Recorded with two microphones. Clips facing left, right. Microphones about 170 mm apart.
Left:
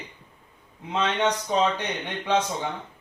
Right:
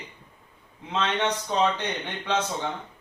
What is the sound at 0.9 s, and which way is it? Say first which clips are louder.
Speech: left 2 dB; 15° left (ahead or behind).